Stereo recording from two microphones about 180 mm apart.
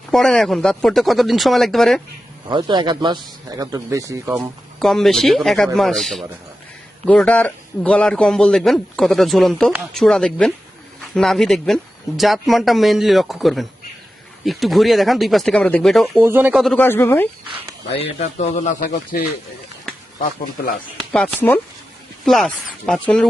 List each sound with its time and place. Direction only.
0.1 s a man's voice: 5° left (ahead or behind)
2.5 s a man's voice: 25° right (ahead or behind)
4.8 s a man's voice: centre (ahead or behind)
16.1 s speech: 10° right (ahead or behind)
16.7 s speech: 10° left (ahead or behind)
17.9 s a man's voice: 35° left (ahead or behind)
18.8 s speech: 55° left (ahead or behind)
21.0 s a man's voice: 5° left (ahead or behind)